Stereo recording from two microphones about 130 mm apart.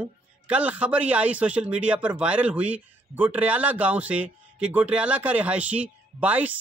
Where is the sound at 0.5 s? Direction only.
10° right (ahead or behind).